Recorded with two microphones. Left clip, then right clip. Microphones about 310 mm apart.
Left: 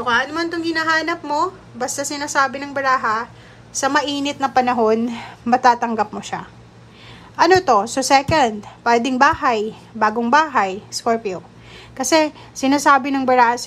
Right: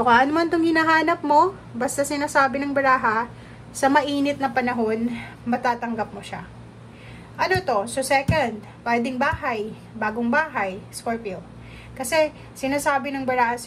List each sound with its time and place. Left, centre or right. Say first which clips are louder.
0.0 s a woman's voice: right 2 dB; centre